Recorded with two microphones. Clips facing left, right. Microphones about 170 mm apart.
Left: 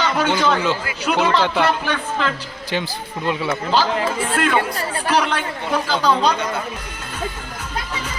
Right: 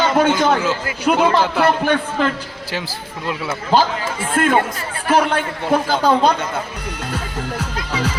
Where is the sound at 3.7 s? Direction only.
50° right (ahead or behind).